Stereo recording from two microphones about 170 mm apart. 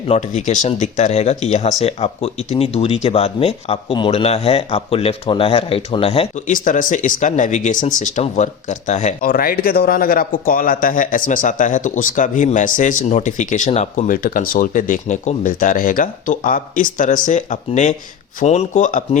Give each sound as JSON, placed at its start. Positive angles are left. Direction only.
{"t": 0.1, "sound": "speech", "side_deg": 45}
{"t": 6.5, "sound": "speech", "side_deg": 50}